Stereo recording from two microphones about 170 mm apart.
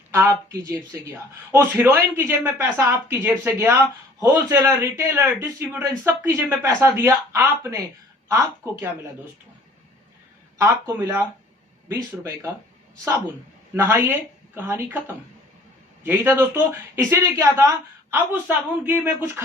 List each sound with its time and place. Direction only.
0.1 s a man's voice: 15° right (ahead or behind)
10.6 s a man's voice: 15° right (ahead or behind)
13.7 s a man's voice: 15° right (ahead or behind)